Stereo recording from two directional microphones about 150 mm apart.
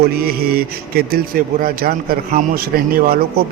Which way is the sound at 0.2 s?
90° right.